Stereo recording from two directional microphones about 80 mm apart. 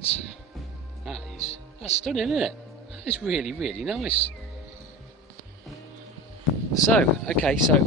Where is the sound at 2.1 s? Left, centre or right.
Centre.